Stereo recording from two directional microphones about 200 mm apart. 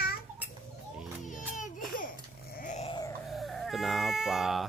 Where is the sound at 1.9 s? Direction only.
45° left (ahead or behind).